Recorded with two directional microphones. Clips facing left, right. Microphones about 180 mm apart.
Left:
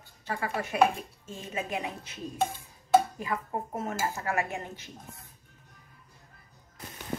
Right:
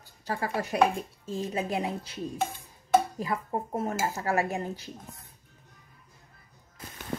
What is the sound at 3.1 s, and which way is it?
Speech, 35° right (ahead or behind).